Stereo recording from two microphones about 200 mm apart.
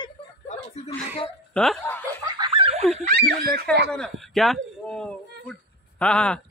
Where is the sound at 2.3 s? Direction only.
25° right (ahead or behind).